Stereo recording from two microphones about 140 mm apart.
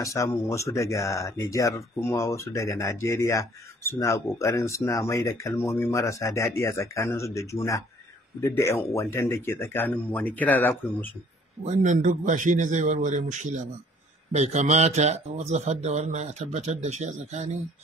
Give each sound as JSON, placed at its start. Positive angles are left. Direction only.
{"t": 0.0, "sound": "speech", "side_deg": 20}
{"t": 11.6, "sound": "speech", "side_deg": -60}